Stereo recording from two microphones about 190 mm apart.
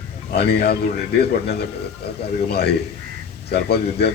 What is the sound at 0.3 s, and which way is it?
Speech, 55° left (ahead or behind).